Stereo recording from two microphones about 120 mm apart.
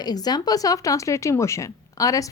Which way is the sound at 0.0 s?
35° left (ahead or behind).